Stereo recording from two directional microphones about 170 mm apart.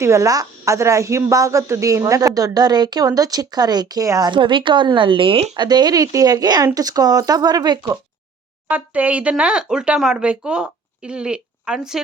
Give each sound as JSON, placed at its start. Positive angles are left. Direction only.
{"t": 0.0, "sound": "speech", "side_deg": -15}
{"t": 8.7, "sound": "speech", "side_deg": -10}